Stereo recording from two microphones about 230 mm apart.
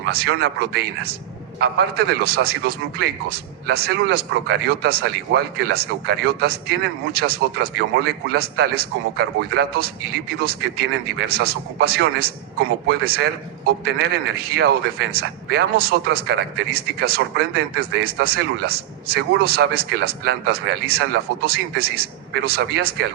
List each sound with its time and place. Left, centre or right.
0.0 s a man's voice: right